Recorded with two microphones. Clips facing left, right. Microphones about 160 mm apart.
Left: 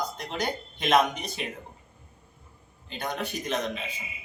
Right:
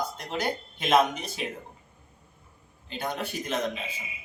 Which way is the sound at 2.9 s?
5° right (ahead or behind).